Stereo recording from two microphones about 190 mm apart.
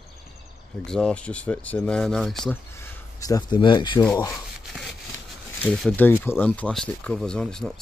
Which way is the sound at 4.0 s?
20° left (ahead or behind).